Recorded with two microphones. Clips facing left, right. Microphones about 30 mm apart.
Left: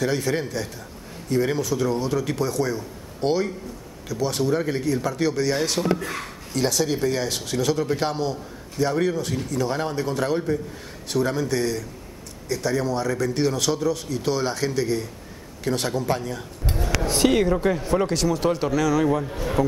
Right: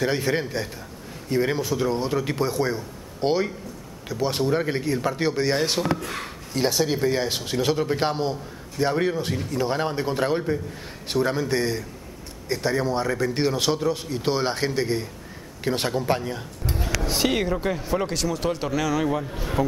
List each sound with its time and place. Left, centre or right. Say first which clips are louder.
0.0 s a man's voice: even; right
17.0 s speech: left 4 dB; centre